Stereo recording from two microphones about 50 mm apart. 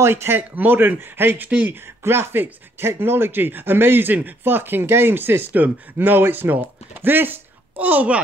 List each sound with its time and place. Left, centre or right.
0.0 s speech: right
0.4 s speech: right
2.0 s speech: right